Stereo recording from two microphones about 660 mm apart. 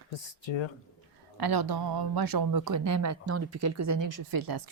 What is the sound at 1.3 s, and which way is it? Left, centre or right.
Speech, right.